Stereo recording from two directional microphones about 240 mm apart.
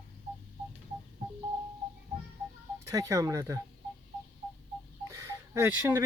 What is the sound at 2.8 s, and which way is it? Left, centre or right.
Speech, centre.